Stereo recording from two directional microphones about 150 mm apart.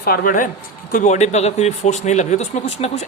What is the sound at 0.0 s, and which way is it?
Speech, 80° left.